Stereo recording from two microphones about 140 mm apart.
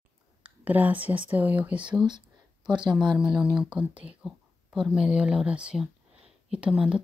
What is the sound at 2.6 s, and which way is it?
Speech, 30° right (ahead or behind).